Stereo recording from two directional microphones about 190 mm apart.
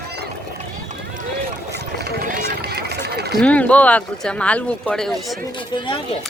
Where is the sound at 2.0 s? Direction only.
45° right (ahead or behind).